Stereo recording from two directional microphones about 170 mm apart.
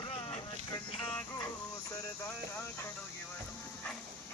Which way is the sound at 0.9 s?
30° left (ahead or behind).